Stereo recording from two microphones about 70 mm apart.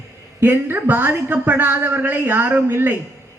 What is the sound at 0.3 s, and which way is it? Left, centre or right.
A woman's voice, right.